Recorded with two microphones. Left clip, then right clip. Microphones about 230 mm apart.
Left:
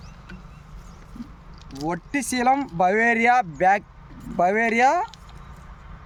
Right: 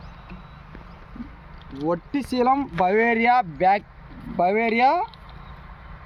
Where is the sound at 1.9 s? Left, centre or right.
Left.